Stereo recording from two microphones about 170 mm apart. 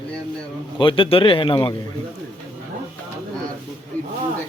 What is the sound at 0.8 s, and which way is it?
Speech, 30° left (ahead or behind).